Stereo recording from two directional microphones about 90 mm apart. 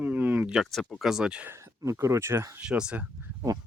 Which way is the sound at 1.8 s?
35° right (ahead or behind).